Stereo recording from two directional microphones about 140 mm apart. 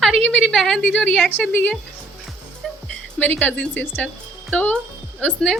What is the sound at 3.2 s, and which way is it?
A woman's voice, 10° left (ahead or behind).